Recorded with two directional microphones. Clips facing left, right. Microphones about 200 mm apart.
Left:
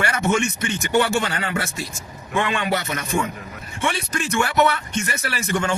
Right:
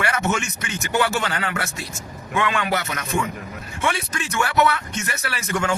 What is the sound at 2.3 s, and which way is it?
Speech, 30° left (ahead or behind).